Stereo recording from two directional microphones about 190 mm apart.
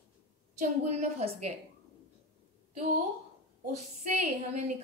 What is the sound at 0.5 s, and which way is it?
Speech, 35° right (ahead or behind).